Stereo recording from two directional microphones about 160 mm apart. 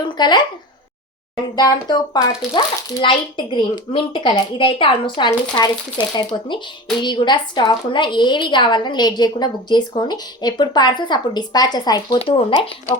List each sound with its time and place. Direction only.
0.0 s speech: 25° left (ahead or behind)
1.5 s a woman's voice: 25° left (ahead or behind)